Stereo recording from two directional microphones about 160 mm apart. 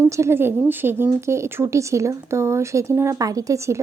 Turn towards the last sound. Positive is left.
turn(degrees=-20)  # may be behind; listen again after turning